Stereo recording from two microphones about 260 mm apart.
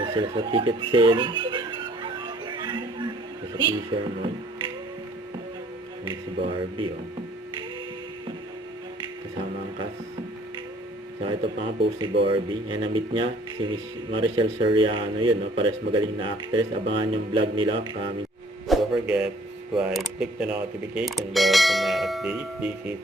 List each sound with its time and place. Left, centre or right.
0.0 s music: centre
3.5 s speech: centre
6.1 s a man's voice: centre
11.3 s a man's voice: centre
18.7 s speech: centre